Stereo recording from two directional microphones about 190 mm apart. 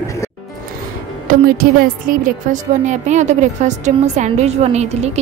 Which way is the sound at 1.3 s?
50° right (ahead or behind).